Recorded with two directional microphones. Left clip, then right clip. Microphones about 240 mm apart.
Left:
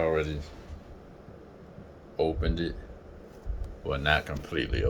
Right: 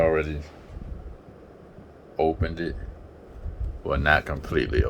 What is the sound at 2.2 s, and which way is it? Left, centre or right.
Speech, centre.